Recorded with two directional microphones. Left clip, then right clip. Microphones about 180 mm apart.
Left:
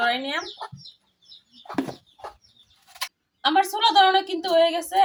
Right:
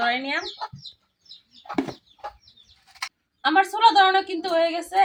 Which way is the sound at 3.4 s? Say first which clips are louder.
Right 2 dB; 5° left (ahead or behind).